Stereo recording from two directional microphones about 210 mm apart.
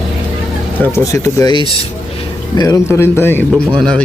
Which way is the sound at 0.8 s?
15° left (ahead or behind).